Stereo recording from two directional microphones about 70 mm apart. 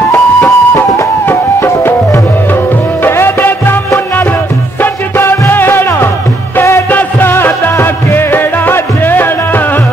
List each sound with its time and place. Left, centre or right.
0.1 s music: left
1.2 s music: left
3.0 s music: left
6.9 s music: left